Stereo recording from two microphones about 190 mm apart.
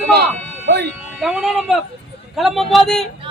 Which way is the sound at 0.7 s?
55° right (ahead or behind).